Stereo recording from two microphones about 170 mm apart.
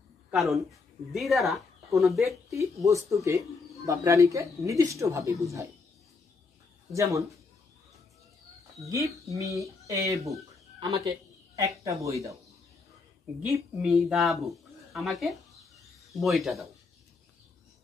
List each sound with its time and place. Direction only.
0.3 s a woman's voice: centre (ahead or behind)
2.2 s speech: 15° right (ahead or behind)
6.9 s speech: 20° right (ahead or behind)
8.8 s speech: 20° right (ahead or behind)
13.4 s speech: 5° right (ahead or behind)